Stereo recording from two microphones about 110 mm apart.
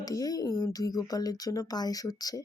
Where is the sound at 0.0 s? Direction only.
35° left (ahead or behind).